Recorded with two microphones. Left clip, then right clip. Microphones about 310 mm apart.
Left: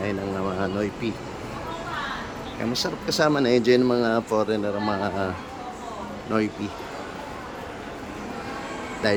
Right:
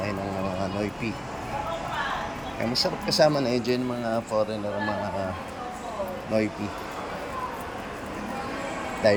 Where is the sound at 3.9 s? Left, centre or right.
Left.